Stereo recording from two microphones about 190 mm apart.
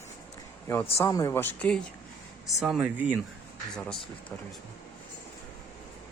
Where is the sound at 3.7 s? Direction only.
5° left (ahead or behind).